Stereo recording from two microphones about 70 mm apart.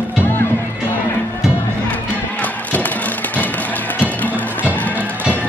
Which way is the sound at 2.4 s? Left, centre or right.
Left.